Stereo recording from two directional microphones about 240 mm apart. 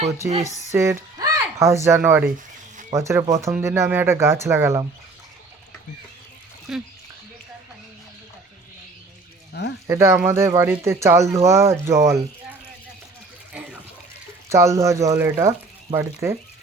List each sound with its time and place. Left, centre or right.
0.7 s speech: centre
6.7 s speech: centre
9.5 s speech: left
9.8 s speech: centre
13.5 s water: centre
14.5 s speech: centre